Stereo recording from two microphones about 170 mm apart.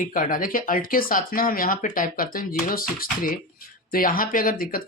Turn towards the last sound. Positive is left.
turn(degrees=55)  # may be behind; listen again after turning